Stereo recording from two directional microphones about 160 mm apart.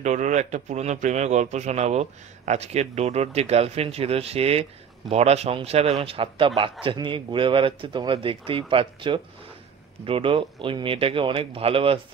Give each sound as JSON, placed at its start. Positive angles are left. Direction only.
{"t": 0.0, "sound": "a man's voice", "side_deg": -50}